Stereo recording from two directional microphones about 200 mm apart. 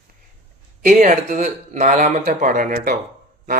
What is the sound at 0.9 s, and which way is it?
Speech, 40° right (ahead or behind).